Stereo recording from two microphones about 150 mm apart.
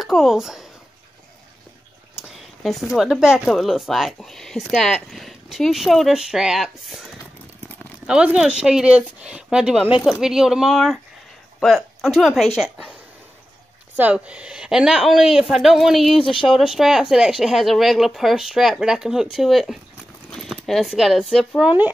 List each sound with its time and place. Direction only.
0.0 s speech: centre (ahead or behind)
2.1 s speech: centre (ahead or behind)
8.1 s speech: 5° right (ahead or behind)
13.9 s speech: 10° right (ahead or behind)
16.2 s speech: 35° left (ahead or behind)
16.4 s speech: centre (ahead or behind)